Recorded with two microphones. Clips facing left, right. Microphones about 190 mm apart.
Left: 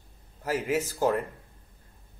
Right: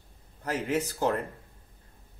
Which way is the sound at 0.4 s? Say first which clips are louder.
Left 1 dB; 5° left (ahead or behind).